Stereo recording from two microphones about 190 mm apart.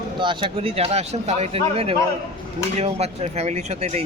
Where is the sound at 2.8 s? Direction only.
35° right (ahead or behind).